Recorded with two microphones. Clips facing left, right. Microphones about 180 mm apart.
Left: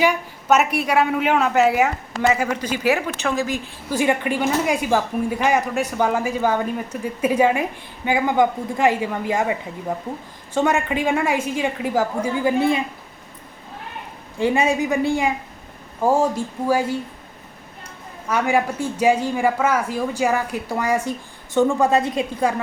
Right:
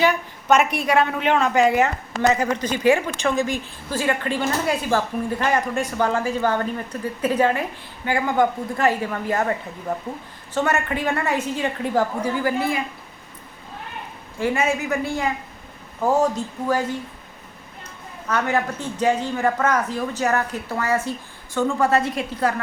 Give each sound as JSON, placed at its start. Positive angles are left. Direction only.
{"t": 0.0, "sound": "a woman's voice", "side_deg": 10}
{"t": 3.9, "sound": "a woman's voice", "side_deg": 15}
{"t": 14.3, "sound": "a woman's voice", "side_deg": 15}
{"t": 18.3, "sound": "a woman's voice", "side_deg": 10}